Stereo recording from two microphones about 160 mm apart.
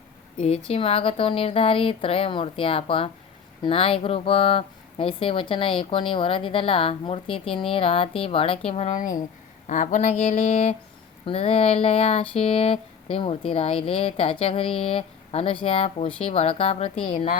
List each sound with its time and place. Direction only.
0.4 s speech: 40° left (ahead or behind)
9.0 s speech: 55° left (ahead or behind)
11.3 s speech: 35° left (ahead or behind)